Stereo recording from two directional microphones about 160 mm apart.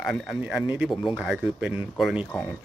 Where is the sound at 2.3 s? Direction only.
10° left (ahead or behind).